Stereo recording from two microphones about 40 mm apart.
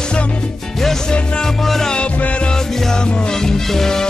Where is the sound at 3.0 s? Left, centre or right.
Left.